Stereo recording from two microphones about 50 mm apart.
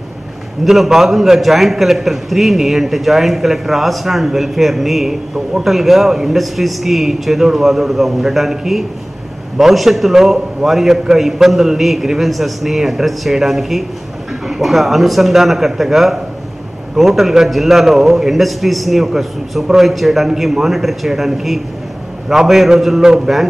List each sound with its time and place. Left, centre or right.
0.7 s a man's voice: centre